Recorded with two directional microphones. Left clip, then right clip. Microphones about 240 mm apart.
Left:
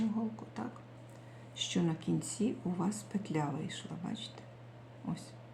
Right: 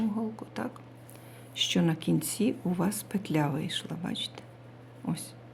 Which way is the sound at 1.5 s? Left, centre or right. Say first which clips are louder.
Right 8 dB; right.